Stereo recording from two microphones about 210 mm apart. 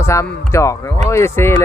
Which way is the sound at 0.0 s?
15° left (ahead or behind).